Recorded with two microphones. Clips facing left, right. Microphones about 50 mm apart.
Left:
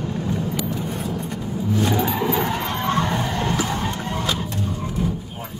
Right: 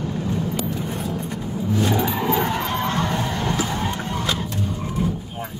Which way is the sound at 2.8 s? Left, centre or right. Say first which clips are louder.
Left 2 dB; left.